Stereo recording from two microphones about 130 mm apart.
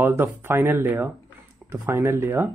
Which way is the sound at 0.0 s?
15° right (ahead or behind).